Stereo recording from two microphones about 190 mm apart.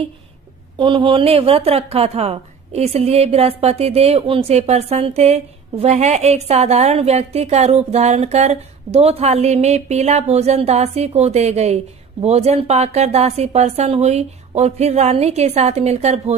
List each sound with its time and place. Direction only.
0.7 s a woman's voice: 25° right (ahead or behind)